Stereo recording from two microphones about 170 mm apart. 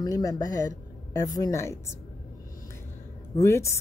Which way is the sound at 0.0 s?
20° left (ahead or behind).